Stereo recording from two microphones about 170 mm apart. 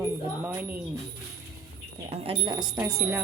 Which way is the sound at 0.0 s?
15° right (ahead or behind).